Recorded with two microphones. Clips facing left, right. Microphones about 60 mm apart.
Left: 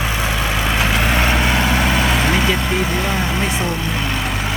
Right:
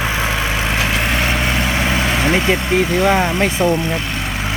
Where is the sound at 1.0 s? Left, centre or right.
Centre.